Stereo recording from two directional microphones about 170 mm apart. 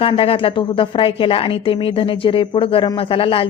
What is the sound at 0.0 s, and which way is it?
A woman's voice, 30° left (ahead or behind).